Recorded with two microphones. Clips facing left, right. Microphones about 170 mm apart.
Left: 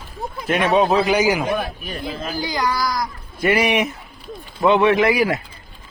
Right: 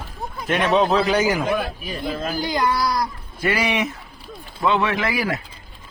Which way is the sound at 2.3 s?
25° right (ahead or behind).